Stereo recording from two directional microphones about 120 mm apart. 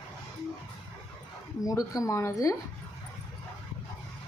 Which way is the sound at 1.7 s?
30° left (ahead or behind).